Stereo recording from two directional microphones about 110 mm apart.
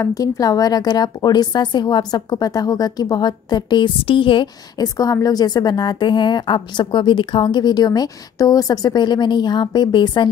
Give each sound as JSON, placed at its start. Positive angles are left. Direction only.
{"t": 0.0, "sound": "a woman's voice", "side_deg": 35}
{"t": 4.7, "sound": "a woman's voice", "side_deg": 35}